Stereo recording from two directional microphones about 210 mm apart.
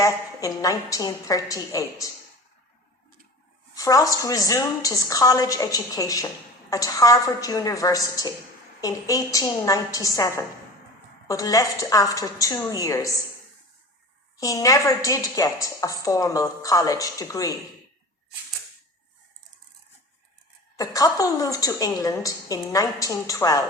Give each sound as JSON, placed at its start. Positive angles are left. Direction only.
{"t": 0.0, "sound": "a woman's voice", "side_deg": 15}
{"t": 3.8, "sound": "a woman's voice", "side_deg": 15}
{"t": 14.3, "sound": "a woman's voice", "side_deg": 15}
{"t": 20.7, "sound": "a woman's voice", "side_deg": 15}